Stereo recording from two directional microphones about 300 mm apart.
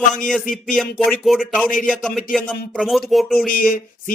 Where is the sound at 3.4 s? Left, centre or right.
Left.